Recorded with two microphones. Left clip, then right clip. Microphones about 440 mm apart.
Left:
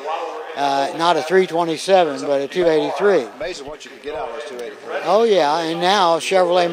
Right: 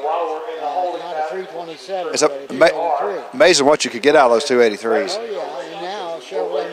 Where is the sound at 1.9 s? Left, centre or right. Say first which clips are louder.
Left 11 dB; left.